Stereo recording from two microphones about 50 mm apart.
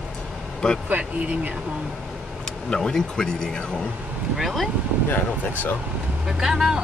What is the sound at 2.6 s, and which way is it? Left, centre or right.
Speech, centre.